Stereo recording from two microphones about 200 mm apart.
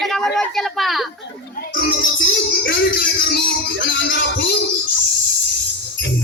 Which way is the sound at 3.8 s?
60° left (ahead or behind).